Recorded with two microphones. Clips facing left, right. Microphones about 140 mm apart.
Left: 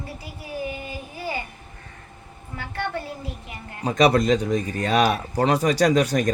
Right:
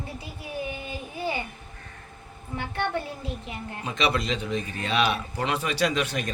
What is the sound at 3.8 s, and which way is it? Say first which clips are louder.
Speech: left 9 dB; 40° left (ahead or behind).